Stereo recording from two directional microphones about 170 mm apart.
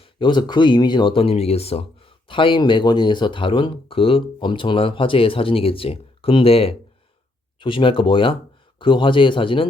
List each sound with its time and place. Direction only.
0.0 s speech: 30° left (ahead or behind)